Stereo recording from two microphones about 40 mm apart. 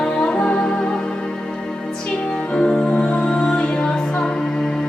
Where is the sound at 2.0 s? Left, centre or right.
Left.